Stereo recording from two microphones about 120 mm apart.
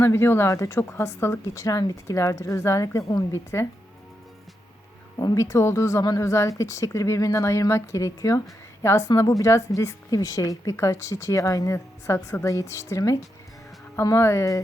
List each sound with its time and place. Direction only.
0.0 s a woman's voice: 20° left (ahead or behind)
5.2 s a woman's voice: 25° left (ahead or behind)